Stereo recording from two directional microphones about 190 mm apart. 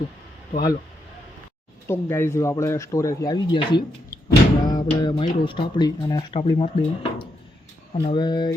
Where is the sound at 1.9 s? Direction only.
15° left (ahead or behind).